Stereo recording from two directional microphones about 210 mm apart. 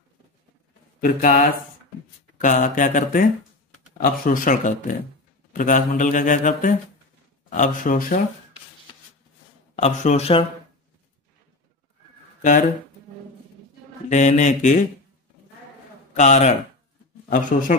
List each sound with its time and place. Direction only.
1.0 s mantra: 40° left (ahead or behind)
2.3 s speech: 35° left (ahead or behind)
9.8 s speech: 30° left (ahead or behind)
12.4 s speech: 35° left (ahead or behind)
14.0 s speech: 35° left (ahead or behind)
16.1 s a man's voice: 35° left (ahead or behind)